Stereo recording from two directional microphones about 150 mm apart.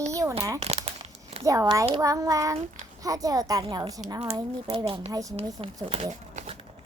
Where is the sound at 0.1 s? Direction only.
20° right (ahead or behind).